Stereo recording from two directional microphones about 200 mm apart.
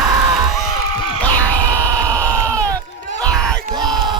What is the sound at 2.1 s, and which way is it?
Sheep, 10° left (ahead or behind).